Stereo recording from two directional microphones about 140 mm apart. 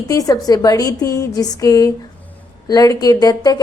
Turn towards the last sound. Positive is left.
turn(degrees=30)  # may be behind; listen again after turning